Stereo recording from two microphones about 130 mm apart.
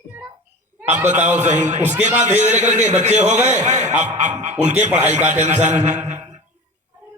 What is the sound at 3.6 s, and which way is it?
Speech, 65° right (ahead or behind).